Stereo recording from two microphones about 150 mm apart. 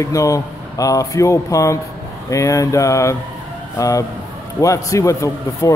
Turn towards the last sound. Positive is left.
turn(degrees=20)  # may be behind; listen again after turning